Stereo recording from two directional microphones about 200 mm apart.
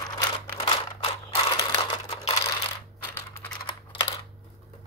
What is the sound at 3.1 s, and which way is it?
Typing, 20° left (ahead or behind).